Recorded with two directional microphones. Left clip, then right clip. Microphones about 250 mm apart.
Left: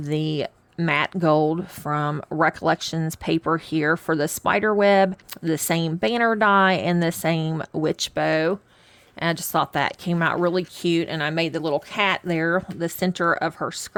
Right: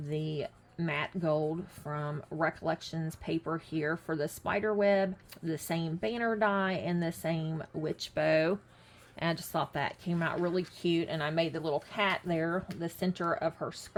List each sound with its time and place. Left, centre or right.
0.0 s speech: left